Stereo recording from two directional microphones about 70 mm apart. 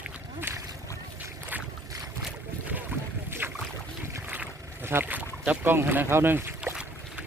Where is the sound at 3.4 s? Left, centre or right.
Right.